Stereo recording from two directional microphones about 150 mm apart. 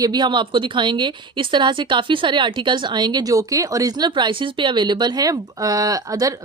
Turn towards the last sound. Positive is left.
turn(degrees=-25)  # may be behind; listen again after turning